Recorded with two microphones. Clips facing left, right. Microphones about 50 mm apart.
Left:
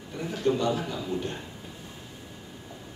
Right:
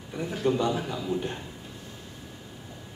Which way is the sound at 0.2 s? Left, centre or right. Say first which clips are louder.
Even; centre.